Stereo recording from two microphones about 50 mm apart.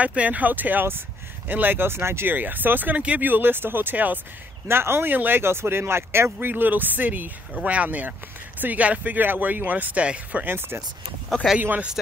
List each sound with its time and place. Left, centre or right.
0.0 s speech: right
2.3 s speech: right
4.6 s speech: right
5.1 s speech: right
5.4 s speech: right
6.5 s speech: right
10.4 s speech: right
11.3 s speech: centre